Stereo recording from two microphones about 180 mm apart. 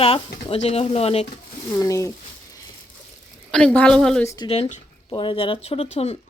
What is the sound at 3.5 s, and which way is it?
Speech, 5° left (ahead or behind).